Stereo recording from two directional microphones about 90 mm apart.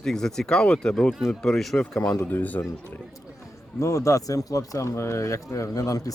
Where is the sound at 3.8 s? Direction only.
35° left (ahead or behind).